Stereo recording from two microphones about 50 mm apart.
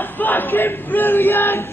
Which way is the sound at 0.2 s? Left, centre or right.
Left.